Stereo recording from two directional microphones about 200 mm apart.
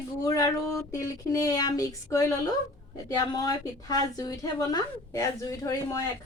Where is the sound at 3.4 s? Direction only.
20° left (ahead or behind).